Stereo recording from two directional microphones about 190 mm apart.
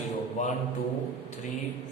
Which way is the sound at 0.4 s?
40° left (ahead or behind).